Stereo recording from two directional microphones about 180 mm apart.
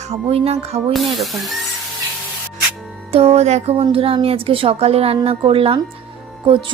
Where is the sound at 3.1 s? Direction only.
35° right (ahead or behind).